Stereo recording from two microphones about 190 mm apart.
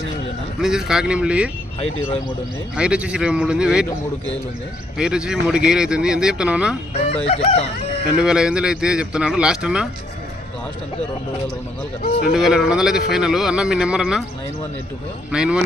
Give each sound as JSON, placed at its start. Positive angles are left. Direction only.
{"t": 0.6, "sound": "a man's voice", "side_deg": 0}
{"t": 1.8, "sound": "a sound", "side_deg": 30}
{"t": 2.7, "sound": "a man's voice", "side_deg": -5}
{"t": 4.9, "sound": "a man's voice", "side_deg": -5}
{"t": 7.3, "sound": "a sound", "side_deg": 35}
{"t": 8.2, "sound": "a man's voice", "side_deg": -5}
{"t": 12.3, "sound": "a man's voice", "side_deg": 0}
{"t": 15.3, "sound": "a man's voice", "side_deg": -5}